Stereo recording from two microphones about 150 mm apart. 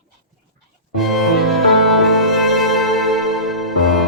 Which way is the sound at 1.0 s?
Centre (ahead or behind).